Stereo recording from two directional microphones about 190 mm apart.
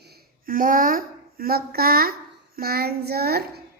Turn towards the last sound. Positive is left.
turn(degrees=-55)  # may be behind; listen again after turning